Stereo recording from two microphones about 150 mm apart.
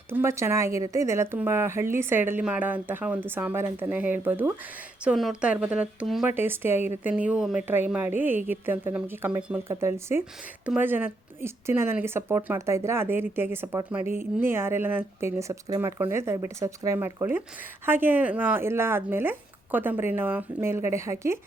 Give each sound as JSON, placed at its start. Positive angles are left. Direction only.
{"t": 0.1, "sound": "speech", "side_deg": -15}